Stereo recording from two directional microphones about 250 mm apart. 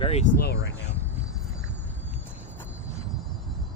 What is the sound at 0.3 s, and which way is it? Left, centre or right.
Speech, left.